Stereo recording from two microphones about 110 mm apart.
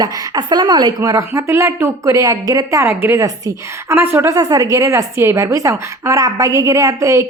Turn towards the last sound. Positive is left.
turn(degrees=-30)  # may be behind; listen again after turning